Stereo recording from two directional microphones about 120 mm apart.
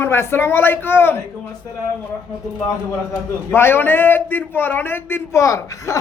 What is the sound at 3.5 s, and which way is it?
A man's voice, 20° left (ahead or behind).